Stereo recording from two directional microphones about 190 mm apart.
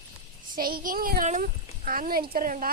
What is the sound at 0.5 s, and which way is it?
Speech, 50° right (ahead or behind).